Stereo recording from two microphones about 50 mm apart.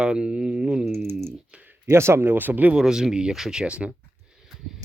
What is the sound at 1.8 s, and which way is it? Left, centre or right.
Speech, right.